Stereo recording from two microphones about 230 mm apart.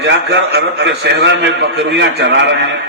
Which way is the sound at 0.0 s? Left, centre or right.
Right.